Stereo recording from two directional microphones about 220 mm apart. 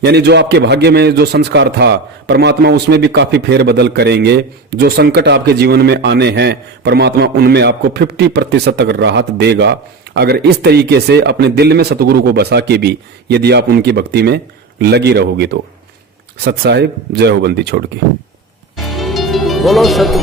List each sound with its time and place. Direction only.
0.0 s a man's voice: 45° right (ahead or behind)
18.8 s music: centre (ahead or behind)